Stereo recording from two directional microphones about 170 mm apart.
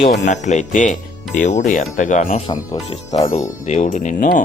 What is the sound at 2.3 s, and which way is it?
Speech, 25° left (ahead or behind).